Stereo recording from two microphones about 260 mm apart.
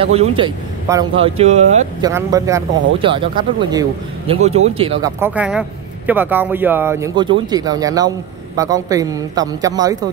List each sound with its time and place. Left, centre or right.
0.0 s speech: right
2.0 s speech: centre
5.2 s speech: centre